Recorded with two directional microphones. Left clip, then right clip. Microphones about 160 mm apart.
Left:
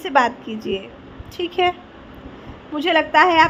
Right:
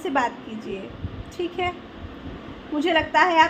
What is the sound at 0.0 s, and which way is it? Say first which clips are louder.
A woman's voice: left 6 dB; 65° left (ahead or behind).